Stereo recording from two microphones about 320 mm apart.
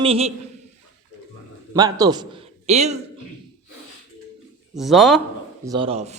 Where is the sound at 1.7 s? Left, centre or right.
Centre.